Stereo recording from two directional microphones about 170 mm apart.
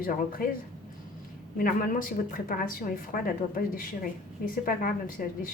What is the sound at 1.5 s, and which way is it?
A woman's voice, 55° left (ahead or behind).